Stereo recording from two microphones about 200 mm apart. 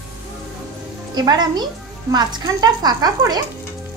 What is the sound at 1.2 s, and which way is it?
Speech, 20° right (ahead or behind).